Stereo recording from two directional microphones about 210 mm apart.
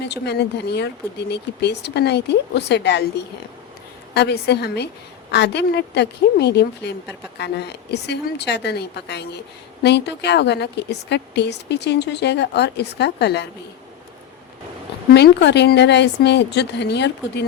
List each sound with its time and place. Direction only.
0.0 s a woman's voice: 55° left (ahead or behind)
15.1 s a woman's voice: 55° left (ahead or behind)